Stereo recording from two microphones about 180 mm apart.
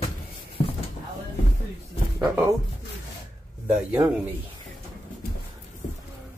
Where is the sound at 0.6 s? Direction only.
30° left (ahead or behind).